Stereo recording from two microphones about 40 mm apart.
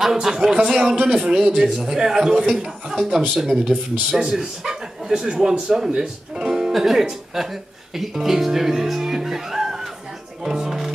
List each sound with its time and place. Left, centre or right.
0.0 s speech: centre
10.4 s music: centre